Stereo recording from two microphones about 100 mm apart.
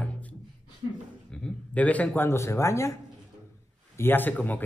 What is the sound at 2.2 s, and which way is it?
Speech, 25° left (ahead or behind).